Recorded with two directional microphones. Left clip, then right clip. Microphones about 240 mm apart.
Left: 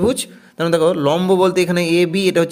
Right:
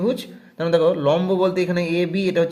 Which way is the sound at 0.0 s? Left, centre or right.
Left.